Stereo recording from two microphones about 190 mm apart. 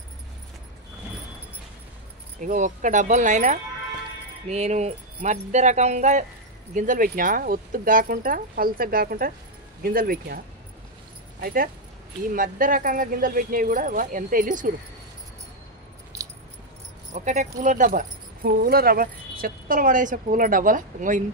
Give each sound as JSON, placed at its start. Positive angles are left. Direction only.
{"t": 2.4, "sound": "speech", "side_deg": -40}
{"t": 11.4, "sound": "speech", "side_deg": -50}
{"t": 17.1, "sound": "speech", "side_deg": -40}